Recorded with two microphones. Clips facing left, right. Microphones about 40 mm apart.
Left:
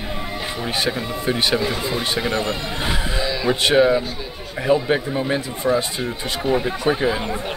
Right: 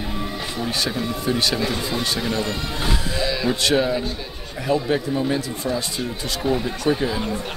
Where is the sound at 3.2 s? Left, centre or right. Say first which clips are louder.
Right 1 dB; centre.